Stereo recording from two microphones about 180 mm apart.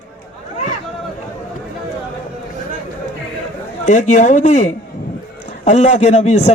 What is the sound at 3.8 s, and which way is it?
A man's voice, 45° left (ahead or behind).